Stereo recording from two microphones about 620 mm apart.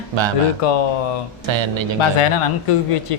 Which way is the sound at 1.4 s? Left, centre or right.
Right.